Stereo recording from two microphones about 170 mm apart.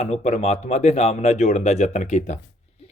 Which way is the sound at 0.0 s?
40° left (ahead or behind).